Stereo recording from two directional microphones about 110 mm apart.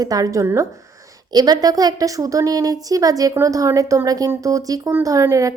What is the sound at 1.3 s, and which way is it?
A woman's voice, 40° right (ahead or behind).